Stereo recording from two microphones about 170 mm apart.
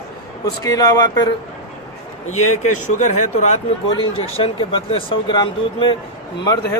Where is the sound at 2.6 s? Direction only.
45° left (ahead or behind).